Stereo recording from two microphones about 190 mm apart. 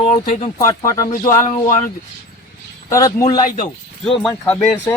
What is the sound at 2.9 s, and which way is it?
Speech, 15° left (ahead or behind).